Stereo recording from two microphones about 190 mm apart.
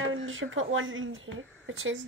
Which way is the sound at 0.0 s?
90° right.